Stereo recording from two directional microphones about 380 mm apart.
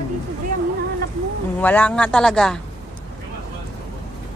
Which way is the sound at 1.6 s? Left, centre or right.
Centre.